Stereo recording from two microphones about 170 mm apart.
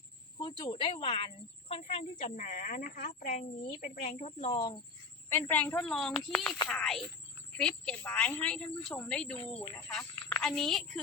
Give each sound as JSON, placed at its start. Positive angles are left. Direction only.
{"t": 0.3, "sound": "speech", "side_deg": 25}
{"t": 5.3, "sound": "a woman's voice", "side_deg": 10}